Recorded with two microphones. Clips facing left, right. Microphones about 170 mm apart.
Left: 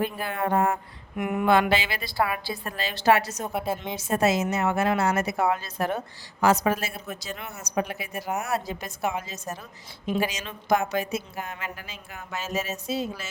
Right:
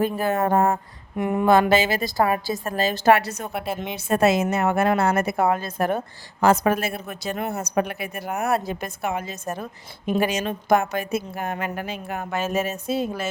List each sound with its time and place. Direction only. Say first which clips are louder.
0.0 s a woman's voice: right 6 dB; 45° right (ahead or behind)
1.1 s a woman's voice: right 4 dB; 30° right (ahead or behind); by 13.2 s 55° right (ahead or behind)